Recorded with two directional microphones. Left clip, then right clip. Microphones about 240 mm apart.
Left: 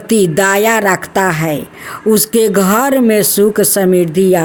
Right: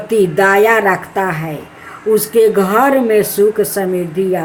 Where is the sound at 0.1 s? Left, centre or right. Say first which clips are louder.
Even; left.